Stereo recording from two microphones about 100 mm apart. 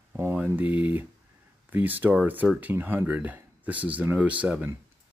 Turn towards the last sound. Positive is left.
turn(degrees=-15)  # may be behind; listen again after turning